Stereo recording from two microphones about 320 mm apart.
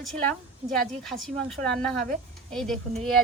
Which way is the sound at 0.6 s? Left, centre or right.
Centre.